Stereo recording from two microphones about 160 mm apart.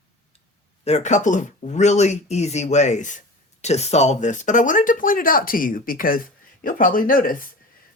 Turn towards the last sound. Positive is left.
turn(degrees=60)  # may be behind; listen again after turning